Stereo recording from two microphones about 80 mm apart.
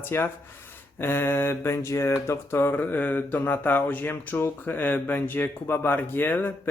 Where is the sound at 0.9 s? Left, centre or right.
Left.